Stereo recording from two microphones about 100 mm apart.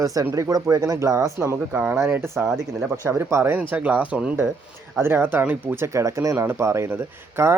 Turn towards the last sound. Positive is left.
turn(degrees=-25)  # may be behind; listen again after turning